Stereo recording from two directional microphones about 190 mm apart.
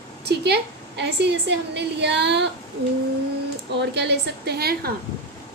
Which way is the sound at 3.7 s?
65° right (ahead or behind).